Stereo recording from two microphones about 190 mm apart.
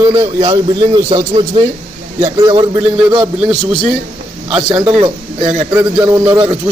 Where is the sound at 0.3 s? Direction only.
25° right (ahead or behind).